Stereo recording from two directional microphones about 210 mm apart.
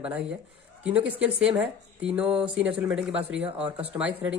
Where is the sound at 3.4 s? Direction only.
30° right (ahead or behind).